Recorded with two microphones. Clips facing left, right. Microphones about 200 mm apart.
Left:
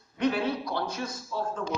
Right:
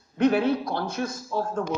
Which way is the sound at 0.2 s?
55° right (ahead or behind).